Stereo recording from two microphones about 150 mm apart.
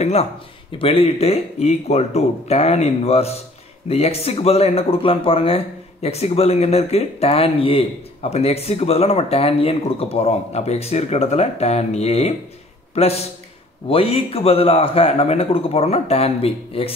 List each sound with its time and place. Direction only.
0.0 s a man's voice: 45° left (ahead or behind)